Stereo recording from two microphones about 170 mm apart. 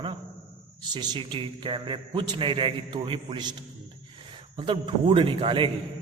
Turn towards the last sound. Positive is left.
turn(degrees=-30)  # may be behind; listen again after turning